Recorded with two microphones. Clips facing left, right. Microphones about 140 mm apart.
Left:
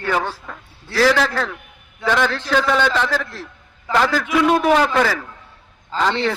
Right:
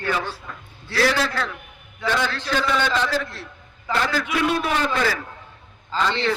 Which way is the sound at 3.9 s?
80° left.